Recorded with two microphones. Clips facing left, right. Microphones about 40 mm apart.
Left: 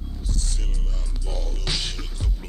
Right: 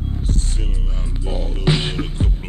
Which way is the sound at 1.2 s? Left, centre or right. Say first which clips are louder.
Right 10 dB; right.